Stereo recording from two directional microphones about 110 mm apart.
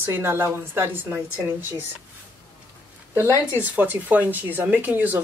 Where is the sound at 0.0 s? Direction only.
20° right (ahead or behind).